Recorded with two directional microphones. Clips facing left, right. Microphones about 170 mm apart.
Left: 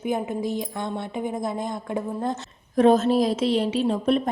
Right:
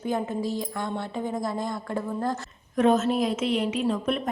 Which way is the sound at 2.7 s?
35° left (ahead or behind).